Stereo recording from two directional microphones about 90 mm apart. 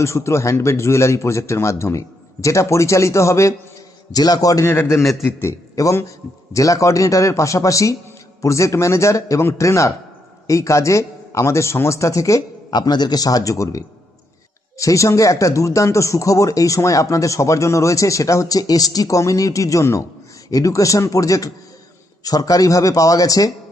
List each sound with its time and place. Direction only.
0.0 s speech: 30° left (ahead or behind)
4.1 s a man's voice: 45° left (ahead or behind)
4.6 s a man's voice: 30° left (ahead or behind)
12.7 s a man's voice: 50° left (ahead or behind)